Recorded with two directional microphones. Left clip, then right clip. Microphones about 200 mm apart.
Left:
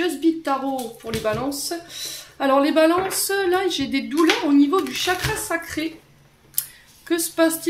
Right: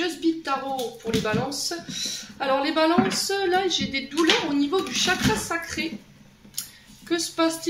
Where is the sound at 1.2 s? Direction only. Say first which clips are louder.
Left 2 dB; 55° left (ahead or behind).